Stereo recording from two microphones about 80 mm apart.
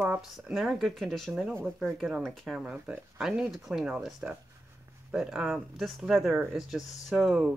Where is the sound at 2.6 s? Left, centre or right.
Centre.